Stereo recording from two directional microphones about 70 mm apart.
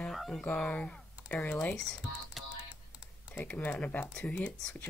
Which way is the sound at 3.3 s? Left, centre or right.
Left.